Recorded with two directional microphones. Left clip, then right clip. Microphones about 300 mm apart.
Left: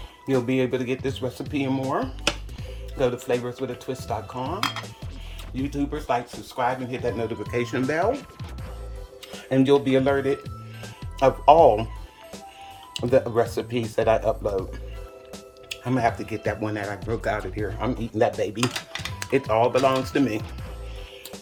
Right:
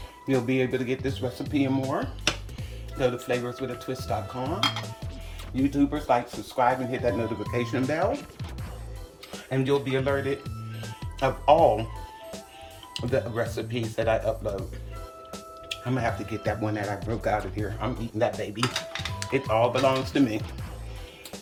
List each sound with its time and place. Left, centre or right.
0.4 s speech: centre
5.5 s speech: centre
9.5 s speech: left
12.9 s speech: centre
15.7 s speech: centre
17.7 s speech: centre